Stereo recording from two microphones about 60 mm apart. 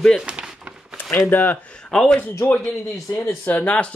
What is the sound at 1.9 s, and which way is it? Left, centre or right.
Speech, centre.